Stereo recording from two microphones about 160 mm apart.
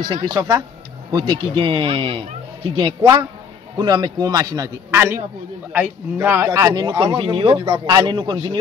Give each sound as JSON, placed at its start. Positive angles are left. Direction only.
{"t": 0.0, "sound": "speech", "side_deg": -25}
{"t": 7.5, "sound": "speech", "side_deg": -20}
{"t": 7.8, "sound": "speech", "side_deg": -30}